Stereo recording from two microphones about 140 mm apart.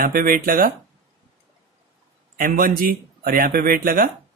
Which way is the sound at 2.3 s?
85° right.